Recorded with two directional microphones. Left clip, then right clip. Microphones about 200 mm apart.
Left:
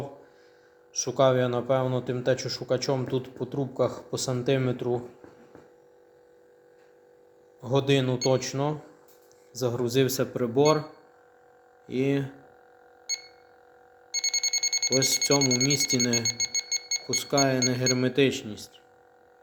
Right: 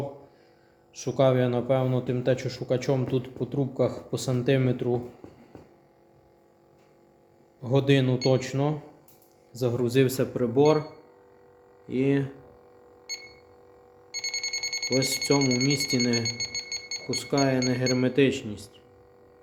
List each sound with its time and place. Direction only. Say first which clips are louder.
0.9 s speech: left 1 dB; centre (ahead or behind)
7.6 s speech: right 1 dB; centre (ahead or behind)
11.9 s speech: right 1 dB; 5° left (ahead or behind)
14.1 s alarm: left 4 dB; 35° left (ahead or behind)
14.9 s speech: even; 5° left (ahead or behind)
16.3 s alarm clock: left 3 dB; 35° left (ahead or behind)
17.1 s speech: left 1 dB; 5° left (ahead or behind)